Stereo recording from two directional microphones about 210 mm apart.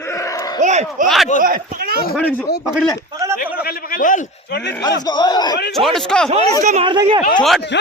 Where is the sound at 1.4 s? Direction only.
45° right (ahead or behind).